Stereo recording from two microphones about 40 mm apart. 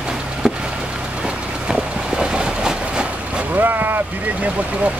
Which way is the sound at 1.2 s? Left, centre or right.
Right.